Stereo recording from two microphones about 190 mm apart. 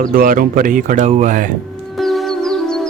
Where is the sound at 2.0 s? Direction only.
Centre (ahead or behind).